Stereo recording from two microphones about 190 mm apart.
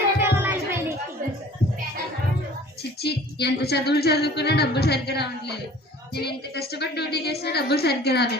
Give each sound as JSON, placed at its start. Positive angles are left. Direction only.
{"t": 0.2, "sound": "music", "side_deg": -10}
{"t": 3.0, "sound": "speech", "side_deg": 60}